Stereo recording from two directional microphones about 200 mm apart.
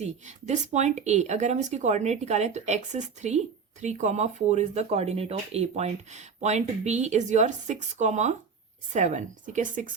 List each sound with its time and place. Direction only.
0.0 s speech: 35° right (ahead or behind)